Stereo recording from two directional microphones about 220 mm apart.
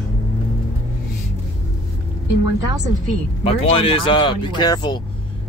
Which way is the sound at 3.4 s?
25° left (ahead or behind).